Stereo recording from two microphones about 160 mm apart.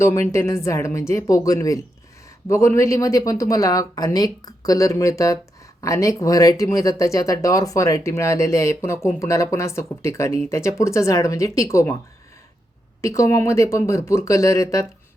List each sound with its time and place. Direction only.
0.0 s speech: 20° left (ahead or behind)
13.0 s speech: 20° left (ahead or behind)